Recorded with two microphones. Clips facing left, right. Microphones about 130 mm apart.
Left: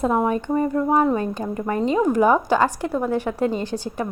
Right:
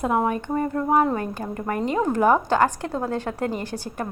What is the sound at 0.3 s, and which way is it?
A woman's voice, 20° left (ahead or behind).